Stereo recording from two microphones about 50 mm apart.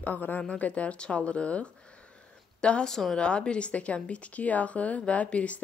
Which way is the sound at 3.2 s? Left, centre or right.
Left.